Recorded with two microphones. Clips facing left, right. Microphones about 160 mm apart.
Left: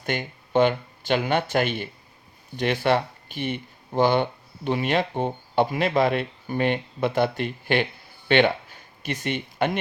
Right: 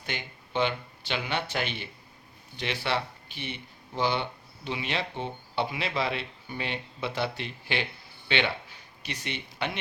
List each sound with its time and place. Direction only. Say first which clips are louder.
0.0 s speech: left 9 dB; 50° left (ahead or behind)